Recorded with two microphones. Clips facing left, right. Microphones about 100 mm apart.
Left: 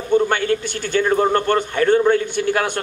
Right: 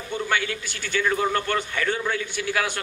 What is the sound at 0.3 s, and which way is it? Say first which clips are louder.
A man's voice: left 7 dB; 45° left (ahead or behind).